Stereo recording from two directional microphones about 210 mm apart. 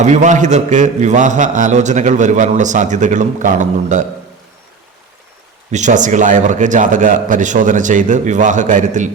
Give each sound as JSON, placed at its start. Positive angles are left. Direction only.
{"t": 0.0, "sound": "a man's voice", "side_deg": -35}
{"t": 5.7, "sound": "a man's voice", "side_deg": -35}